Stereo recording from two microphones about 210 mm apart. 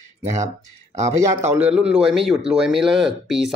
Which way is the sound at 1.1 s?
15° right (ahead or behind).